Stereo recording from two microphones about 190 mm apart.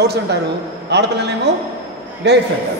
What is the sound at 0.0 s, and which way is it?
A man's voice, 60° right (ahead or behind).